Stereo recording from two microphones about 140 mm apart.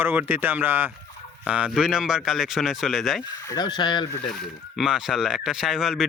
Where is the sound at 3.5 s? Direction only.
30° left (ahead or behind).